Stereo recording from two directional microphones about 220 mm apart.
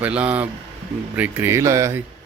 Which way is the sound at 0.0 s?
5° right (ahead or behind).